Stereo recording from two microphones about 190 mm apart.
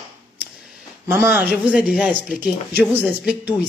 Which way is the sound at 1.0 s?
10° right (ahead or behind).